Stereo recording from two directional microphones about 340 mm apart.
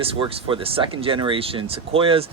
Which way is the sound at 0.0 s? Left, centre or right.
Centre.